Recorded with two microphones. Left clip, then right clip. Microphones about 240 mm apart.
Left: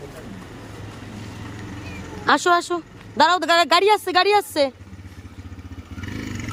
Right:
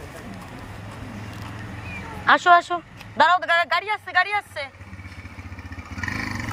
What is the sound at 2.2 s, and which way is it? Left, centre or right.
Speech, centre.